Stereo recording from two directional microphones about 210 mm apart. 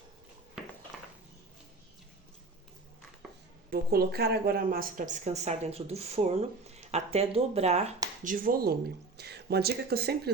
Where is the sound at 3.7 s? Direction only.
45° right (ahead or behind).